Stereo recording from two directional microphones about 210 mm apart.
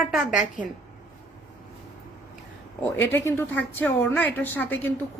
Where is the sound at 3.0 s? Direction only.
10° left (ahead or behind).